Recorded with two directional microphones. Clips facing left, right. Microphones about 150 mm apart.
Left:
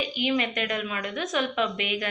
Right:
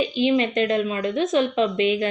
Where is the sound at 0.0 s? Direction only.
25° right (ahead or behind).